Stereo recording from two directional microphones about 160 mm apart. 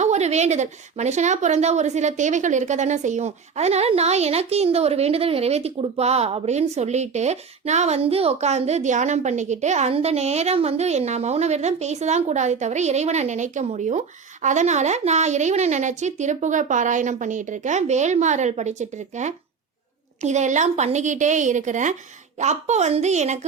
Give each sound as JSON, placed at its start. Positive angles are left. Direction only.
{"t": 0.0, "sound": "a woman's voice", "side_deg": -45}